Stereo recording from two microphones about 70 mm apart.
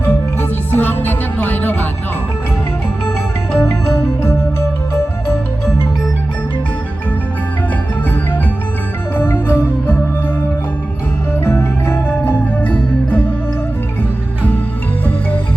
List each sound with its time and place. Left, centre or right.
0.7 s music: left
3.5 s music: left
9.1 s music: left
11.4 s music: left